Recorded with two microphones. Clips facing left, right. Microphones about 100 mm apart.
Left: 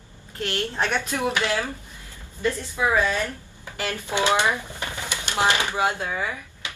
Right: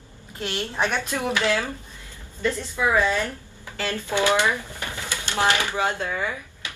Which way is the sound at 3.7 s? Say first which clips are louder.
Right 1 dB; 15° left (ahead or behind).